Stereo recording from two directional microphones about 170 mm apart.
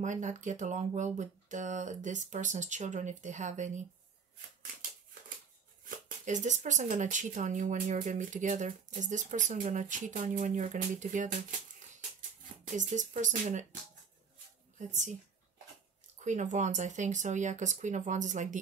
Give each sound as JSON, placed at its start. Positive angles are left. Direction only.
{"t": 0.0, "sound": "speech", "side_deg": -45}
{"t": 5.9, "sound": "speech", "side_deg": -45}
{"t": 12.7, "sound": "speech", "side_deg": -45}
{"t": 14.8, "sound": "speech", "side_deg": -45}
{"t": 16.3, "sound": "speech", "side_deg": -45}